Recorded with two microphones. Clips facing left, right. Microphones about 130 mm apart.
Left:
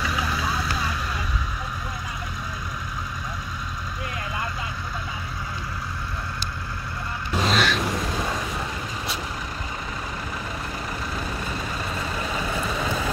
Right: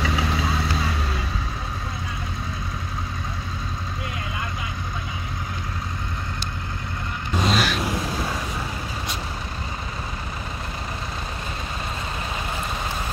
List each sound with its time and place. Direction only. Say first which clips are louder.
0.0 s vehicle: right 2 dB; 25° right (ahead or behind)
7.3 s vehicle: even; centre (ahead or behind)